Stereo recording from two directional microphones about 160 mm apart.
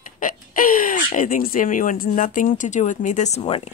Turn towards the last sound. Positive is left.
turn(degrees=35)  # may be behind; listen again after turning